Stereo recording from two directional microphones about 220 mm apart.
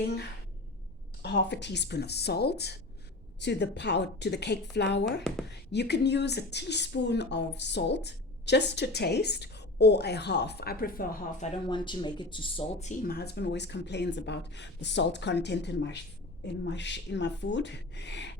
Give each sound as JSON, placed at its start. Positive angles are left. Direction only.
{"t": 1.2, "sound": "speech", "side_deg": 50}
{"t": 11.7, "sound": "speech", "side_deg": 20}